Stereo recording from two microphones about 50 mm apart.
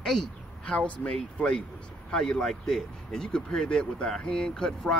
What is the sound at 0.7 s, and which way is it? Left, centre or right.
Speech, left.